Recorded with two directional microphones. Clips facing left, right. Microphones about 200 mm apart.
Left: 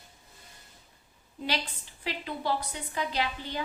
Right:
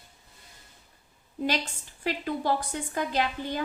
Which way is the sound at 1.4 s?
50° right (ahead or behind).